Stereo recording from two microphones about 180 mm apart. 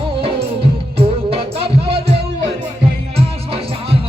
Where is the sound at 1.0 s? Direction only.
30° right (ahead or behind).